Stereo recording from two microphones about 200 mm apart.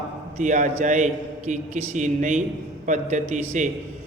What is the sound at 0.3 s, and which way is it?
A man's voice, 40° right (ahead or behind).